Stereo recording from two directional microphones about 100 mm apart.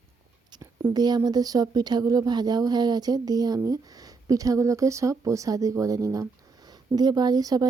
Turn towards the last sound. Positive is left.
turn(degrees=-40)  # may be behind; listen again after turning